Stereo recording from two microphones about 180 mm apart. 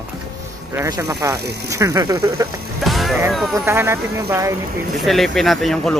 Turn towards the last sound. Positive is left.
turn(degrees=5)  # may be behind; listen again after turning